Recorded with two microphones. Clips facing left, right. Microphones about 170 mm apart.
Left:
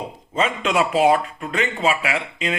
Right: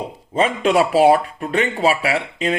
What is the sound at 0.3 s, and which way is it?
Speech, 35° right (ahead or behind).